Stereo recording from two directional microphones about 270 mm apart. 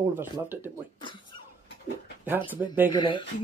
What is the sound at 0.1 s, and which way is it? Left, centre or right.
Speech, centre.